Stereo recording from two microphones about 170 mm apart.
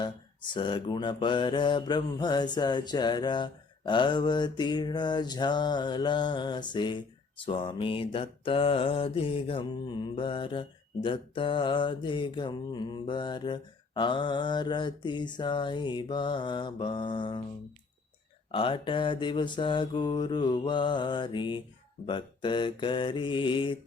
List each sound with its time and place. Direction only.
0.5 s mantra: 30° left (ahead or behind)
18.5 s mantra: 30° left (ahead or behind)